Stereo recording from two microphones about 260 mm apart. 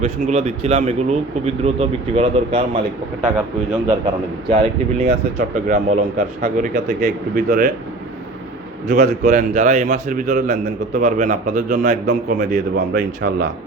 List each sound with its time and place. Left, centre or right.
0.0 s a man's voice: right
3.2 s a man's voice: centre
3.8 s a man's voice: centre
8.9 s a man's voice: right
12.7 s speech: right